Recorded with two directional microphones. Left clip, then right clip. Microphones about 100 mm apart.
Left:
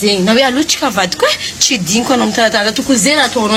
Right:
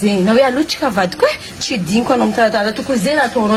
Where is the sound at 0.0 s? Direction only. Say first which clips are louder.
Left 2 dB; 10° right (ahead or behind).